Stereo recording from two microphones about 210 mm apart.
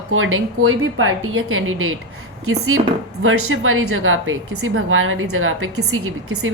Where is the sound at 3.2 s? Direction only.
70° right (ahead or behind).